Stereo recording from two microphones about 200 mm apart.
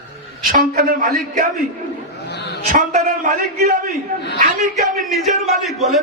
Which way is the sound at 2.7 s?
40° right (ahead or behind).